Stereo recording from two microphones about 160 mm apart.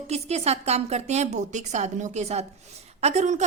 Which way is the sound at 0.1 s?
40° right (ahead or behind).